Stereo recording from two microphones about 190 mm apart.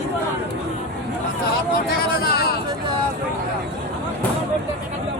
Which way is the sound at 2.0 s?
55° left (ahead or behind).